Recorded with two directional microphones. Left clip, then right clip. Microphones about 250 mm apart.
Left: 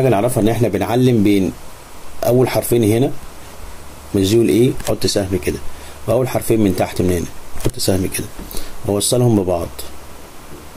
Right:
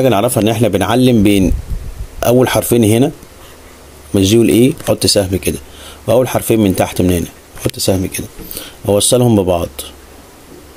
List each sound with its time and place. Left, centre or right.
0.0 s speech: right
2.1 s speech: right
4.1 s speech: right